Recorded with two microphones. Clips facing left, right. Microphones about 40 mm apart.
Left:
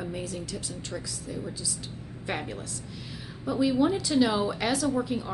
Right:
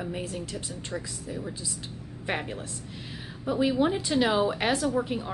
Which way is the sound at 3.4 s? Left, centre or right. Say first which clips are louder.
Even; right.